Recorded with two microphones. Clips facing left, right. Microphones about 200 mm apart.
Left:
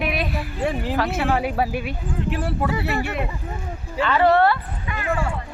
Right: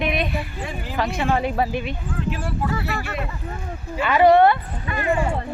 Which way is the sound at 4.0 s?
15° right (ahead or behind).